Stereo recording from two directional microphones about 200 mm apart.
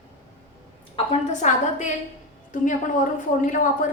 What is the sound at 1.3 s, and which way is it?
A woman's voice, 35° left (ahead or behind).